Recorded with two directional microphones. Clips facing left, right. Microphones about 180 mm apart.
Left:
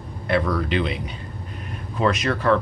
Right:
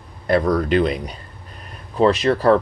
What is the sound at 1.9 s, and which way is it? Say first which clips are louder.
Speech: right 6 dB; 30° right (ahead or behind).